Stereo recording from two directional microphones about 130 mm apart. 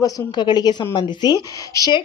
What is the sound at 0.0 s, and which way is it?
A woman's voice, 35° left (ahead or behind).